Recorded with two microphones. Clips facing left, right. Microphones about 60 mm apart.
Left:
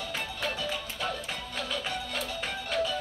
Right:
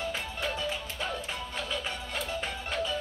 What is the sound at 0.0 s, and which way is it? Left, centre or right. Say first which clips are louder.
Music: right 1 dB; right.